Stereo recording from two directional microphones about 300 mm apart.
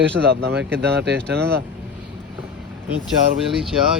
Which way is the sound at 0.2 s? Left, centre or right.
Right.